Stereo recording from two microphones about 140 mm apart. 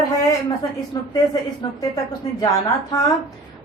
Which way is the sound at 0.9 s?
30° left (ahead or behind).